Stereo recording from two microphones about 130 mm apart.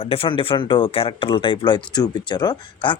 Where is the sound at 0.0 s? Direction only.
45° left (ahead or behind).